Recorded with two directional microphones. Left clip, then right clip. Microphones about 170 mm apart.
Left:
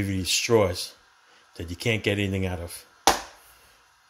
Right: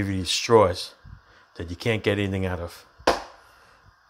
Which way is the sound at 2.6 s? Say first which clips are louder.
Right 3 dB; 20° left (ahead or behind).